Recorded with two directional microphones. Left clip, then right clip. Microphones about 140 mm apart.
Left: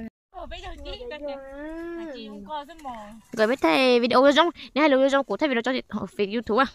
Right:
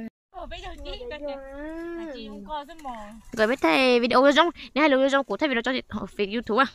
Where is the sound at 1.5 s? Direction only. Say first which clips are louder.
Even; 5° left (ahead or behind).